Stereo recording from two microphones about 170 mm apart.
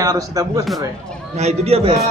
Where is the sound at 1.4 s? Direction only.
40° right (ahead or behind).